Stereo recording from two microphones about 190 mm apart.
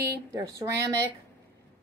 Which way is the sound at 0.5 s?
20° right (ahead or behind).